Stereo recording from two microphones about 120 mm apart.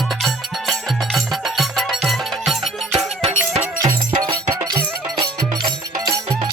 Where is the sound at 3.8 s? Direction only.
35° right (ahead or behind).